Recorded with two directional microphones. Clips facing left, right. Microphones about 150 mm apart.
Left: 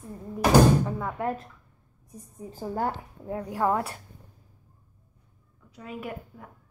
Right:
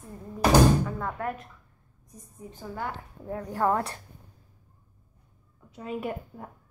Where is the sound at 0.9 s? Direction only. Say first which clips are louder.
Left 1 dB; 10° left (ahead or behind).